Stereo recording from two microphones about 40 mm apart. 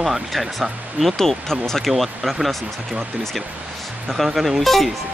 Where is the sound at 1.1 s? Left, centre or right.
Centre.